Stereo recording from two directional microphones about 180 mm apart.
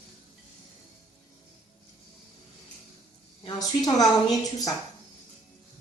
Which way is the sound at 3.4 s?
20° left (ahead or behind).